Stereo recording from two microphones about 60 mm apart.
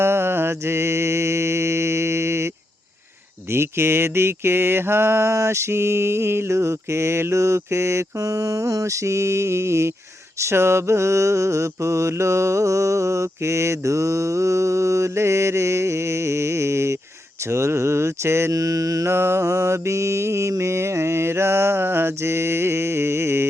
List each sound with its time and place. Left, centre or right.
0.0 s mantra: right
3.5 s mantra: right
18.5 s mantra: right
19.0 s mantra: right